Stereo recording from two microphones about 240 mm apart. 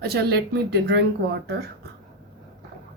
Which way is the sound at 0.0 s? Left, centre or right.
Right.